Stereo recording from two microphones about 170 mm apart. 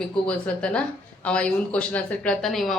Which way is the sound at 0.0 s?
5° left (ahead or behind).